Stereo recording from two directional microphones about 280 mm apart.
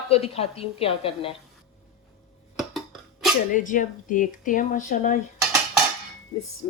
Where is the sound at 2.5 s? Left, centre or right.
Centre.